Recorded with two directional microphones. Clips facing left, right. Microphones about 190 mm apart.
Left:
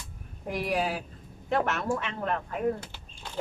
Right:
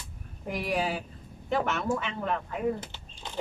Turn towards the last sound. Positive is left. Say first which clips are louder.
# right 1 dB
turn(degrees=-20)  # may be behind; listen again after turning